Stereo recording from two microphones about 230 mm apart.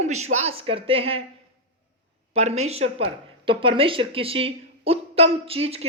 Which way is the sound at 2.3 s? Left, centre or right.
Right.